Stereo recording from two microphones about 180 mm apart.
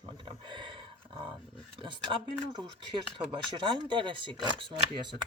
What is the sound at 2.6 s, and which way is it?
Speech, 25° right (ahead or behind).